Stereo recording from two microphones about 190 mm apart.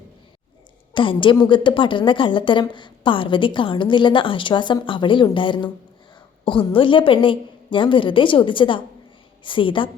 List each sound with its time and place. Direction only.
0.9 s speech: 25° left (ahead or behind)